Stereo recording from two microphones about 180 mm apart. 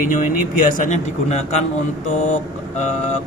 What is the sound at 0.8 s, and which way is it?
Speech, 40° left (ahead or behind).